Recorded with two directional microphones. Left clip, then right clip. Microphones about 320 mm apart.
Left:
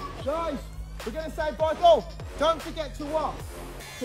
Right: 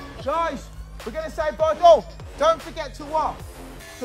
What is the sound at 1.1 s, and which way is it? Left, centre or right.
Speech, right.